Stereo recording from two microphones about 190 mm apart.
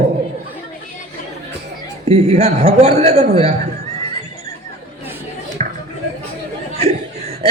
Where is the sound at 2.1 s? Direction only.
35° right (ahead or behind).